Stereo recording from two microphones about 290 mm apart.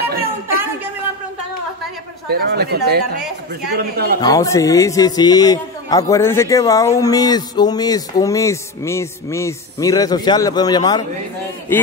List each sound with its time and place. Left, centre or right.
2.2 s speech: right
4.2 s a man's voice: centre